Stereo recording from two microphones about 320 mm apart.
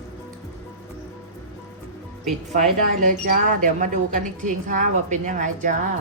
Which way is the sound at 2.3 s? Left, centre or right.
Right.